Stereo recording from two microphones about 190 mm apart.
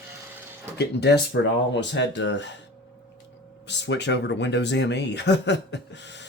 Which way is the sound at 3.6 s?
65° left (ahead or behind).